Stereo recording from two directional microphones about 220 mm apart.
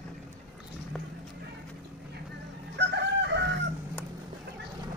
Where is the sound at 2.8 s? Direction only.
55° right (ahead or behind).